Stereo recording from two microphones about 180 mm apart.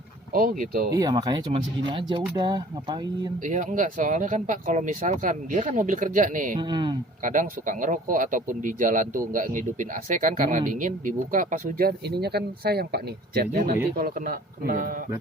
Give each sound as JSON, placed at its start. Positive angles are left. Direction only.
{"t": 0.3, "sound": "speech", "side_deg": -50}
{"t": 0.9, "sound": "speech", "side_deg": -20}
{"t": 3.4, "sound": "speech", "side_deg": -45}
{"t": 6.6, "sound": "speech", "side_deg": -25}
{"t": 7.3, "sound": "speech", "side_deg": -45}